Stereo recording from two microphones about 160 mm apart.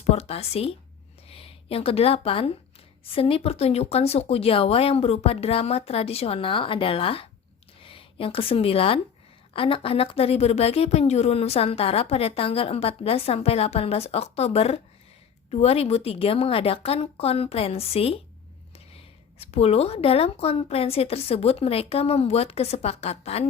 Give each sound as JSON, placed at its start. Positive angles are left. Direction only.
{"t": 0.0, "sound": "a woman's voice", "side_deg": 40}